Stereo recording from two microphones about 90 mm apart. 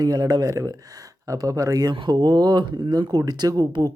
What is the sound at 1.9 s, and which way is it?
Speech, 65° right (ahead or behind).